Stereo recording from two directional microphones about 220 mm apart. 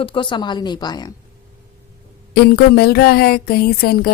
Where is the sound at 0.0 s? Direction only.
20° left (ahead or behind).